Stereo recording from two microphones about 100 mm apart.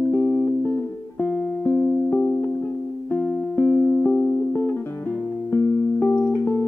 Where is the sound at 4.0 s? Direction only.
20° left (ahead or behind).